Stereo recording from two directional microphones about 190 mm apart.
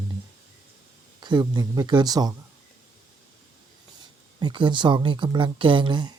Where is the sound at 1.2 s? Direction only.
25° right (ahead or behind).